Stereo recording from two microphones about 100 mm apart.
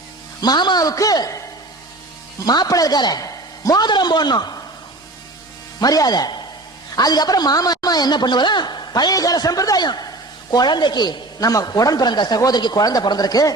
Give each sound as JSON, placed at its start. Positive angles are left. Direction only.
{"t": 0.4, "sound": "a man's voice", "side_deg": 45}
{"t": 5.8, "sound": "a man's voice", "side_deg": 40}